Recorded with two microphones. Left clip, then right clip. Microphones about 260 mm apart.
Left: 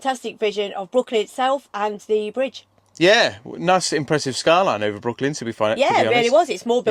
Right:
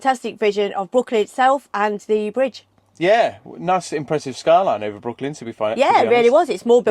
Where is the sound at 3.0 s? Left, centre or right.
Left.